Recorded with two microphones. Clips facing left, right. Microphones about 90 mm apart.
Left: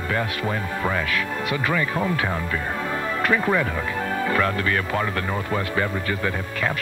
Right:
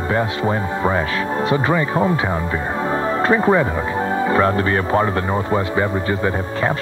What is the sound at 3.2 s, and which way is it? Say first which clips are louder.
Speech: right 6 dB; 30° right (ahead or behind).